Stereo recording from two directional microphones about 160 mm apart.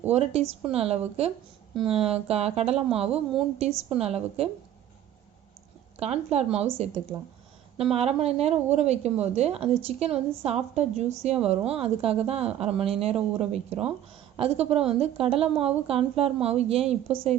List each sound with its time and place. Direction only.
0.1 s a woman's voice: 40° right (ahead or behind)
6.0 s a woman's voice: 40° right (ahead or behind)
7.9 s a woman's voice: 40° right (ahead or behind)